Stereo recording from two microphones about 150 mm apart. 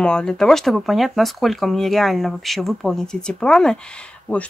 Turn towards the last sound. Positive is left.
turn(degrees=5)  # may be behind; listen again after turning